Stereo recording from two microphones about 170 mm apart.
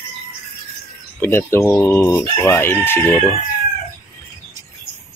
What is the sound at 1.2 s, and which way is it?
Speech, 15° left (ahead or behind).